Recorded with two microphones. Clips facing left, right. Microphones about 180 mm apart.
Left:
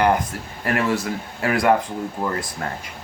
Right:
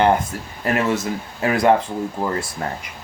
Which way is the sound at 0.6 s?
20° right (ahead or behind).